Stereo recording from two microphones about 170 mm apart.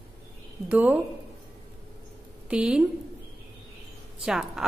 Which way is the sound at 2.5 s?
5° right (ahead or behind).